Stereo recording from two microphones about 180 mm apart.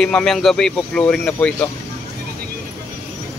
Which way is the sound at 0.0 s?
5° left (ahead or behind).